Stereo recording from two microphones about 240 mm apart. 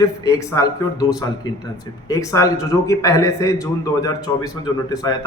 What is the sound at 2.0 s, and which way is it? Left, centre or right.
Speech, centre.